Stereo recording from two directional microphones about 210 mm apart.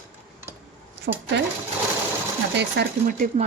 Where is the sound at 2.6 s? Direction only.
50° right (ahead or behind).